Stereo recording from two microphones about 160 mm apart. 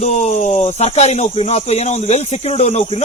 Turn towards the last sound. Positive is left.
turn(degrees=40)  # may be behind; listen again after turning